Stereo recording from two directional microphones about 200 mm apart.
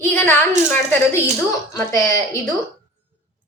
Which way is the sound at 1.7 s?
15° left (ahead or behind).